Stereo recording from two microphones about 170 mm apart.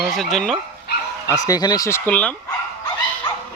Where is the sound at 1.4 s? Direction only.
20° left (ahead or behind).